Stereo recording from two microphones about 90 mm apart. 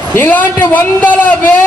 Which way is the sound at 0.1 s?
20° left (ahead or behind).